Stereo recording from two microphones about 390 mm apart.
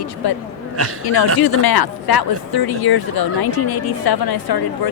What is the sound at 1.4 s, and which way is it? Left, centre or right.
Speech, left.